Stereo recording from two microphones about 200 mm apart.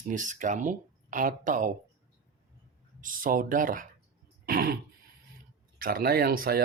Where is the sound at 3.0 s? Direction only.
45° right (ahead or behind).